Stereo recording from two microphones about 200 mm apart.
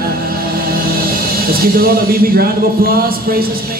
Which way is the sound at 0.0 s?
50° right (ahead or behind).